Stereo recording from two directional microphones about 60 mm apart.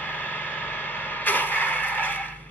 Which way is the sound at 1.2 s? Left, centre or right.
Left.